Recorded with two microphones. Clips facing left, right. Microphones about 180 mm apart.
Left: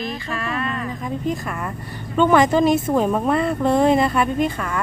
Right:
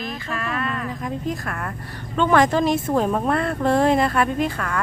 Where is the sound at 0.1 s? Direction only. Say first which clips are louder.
Left 1 dB; centre (ahead or behind).